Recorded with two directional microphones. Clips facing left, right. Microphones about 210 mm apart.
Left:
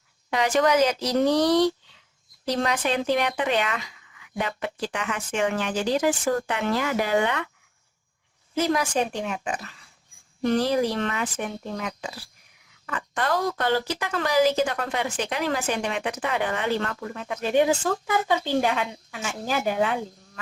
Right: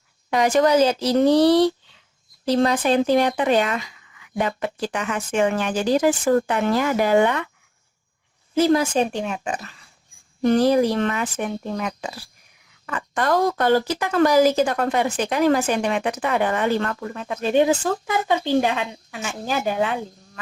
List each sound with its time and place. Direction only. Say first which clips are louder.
0.3 s speech: right 4 dB; 40° right (ahead or behind)
8.5 s a woman's voice: right 6 dB; 30° right (ahead or behind)
10.4 s speech: right 5 dB; 45° right (ahead or behind)
17.5 s a woman's voice: right 3 dB; 25° right (ahead or behind)